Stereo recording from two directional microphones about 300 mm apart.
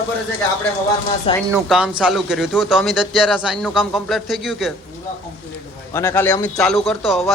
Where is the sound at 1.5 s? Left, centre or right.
Centre.